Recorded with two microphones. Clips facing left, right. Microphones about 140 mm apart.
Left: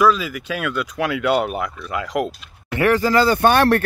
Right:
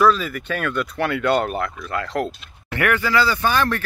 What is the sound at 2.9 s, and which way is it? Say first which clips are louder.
Speech: left 4 dB; 40° left (ahead or behind).